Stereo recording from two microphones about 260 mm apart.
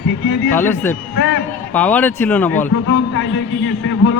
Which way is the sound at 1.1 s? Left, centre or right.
Left.